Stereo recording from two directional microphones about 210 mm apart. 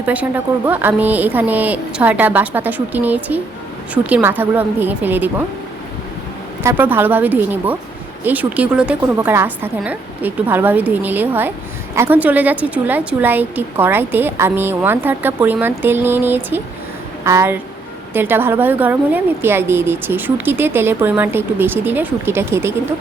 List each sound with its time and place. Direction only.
0.0 s a woman's voice: 5° right (ahead or behind)
6.6 s a woman's voice: 10° right (ahead or behind)